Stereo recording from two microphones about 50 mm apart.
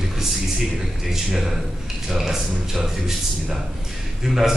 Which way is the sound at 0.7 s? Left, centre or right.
Centre.